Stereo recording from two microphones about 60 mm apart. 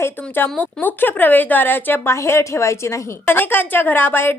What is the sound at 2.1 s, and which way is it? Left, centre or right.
A woman's voice, left.